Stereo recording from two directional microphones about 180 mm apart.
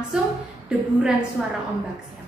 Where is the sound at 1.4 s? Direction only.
Centre (ahead or behind).